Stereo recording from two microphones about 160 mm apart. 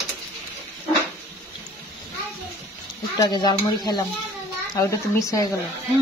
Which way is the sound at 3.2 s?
25° left (ahead or behind).